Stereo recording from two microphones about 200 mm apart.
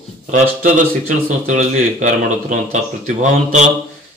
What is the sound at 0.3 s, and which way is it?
Speech, 45° right (ahead or behind).